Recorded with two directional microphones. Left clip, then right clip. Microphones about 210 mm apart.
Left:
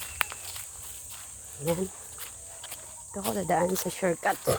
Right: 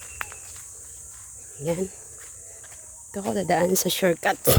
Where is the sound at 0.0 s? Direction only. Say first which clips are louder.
Left 4 dB; 55° left (ahead or behind).